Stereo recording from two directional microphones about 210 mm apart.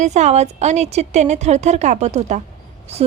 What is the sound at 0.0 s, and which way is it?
A woman's voice, 35° right (ahead or behind).